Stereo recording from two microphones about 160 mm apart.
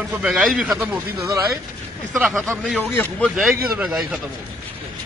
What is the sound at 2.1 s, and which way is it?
Speech, centre (ahead or behind).